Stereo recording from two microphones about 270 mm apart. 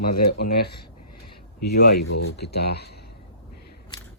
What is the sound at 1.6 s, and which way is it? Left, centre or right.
Speech, left.